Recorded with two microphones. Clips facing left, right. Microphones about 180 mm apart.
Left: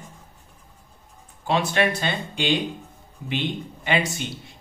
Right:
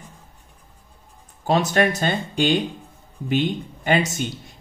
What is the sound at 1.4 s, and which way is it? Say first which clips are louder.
Speech: right 3 dB; 45° right (ahead or behind).